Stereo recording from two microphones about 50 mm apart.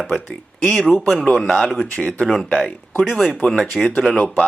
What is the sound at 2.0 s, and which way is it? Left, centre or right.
Speech, left.